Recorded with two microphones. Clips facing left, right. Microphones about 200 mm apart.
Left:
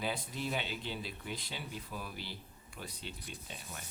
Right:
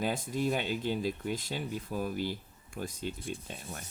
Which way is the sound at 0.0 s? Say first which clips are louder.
Right 7 dB; 45° right (ahead or behind).